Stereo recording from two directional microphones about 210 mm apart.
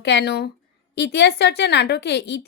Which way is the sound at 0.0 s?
55° left (ahead or behind).